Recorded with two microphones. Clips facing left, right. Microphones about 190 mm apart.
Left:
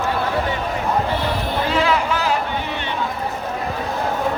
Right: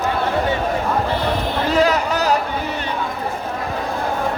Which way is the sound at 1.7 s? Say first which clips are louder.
Right 3 dB; 40° right (ahead or behind).